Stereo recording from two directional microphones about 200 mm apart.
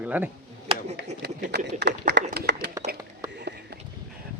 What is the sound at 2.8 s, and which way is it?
Whispering, 55° right (ahead or behind).